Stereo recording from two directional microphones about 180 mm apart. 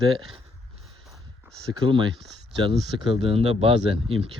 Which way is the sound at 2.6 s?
30° right (ahead or behind).